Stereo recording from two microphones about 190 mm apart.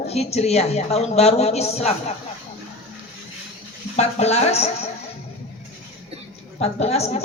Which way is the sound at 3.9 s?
35° left (ahead or behind).